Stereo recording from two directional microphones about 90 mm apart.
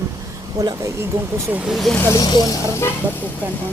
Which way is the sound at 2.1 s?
45° left (ahead or behind).